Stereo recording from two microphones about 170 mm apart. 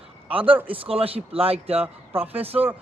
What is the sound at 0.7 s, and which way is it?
A man's voice, 35° right (ahead or behind).